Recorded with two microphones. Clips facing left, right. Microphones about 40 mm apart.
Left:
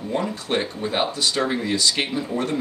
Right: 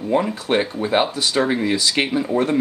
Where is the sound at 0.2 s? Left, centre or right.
Centre.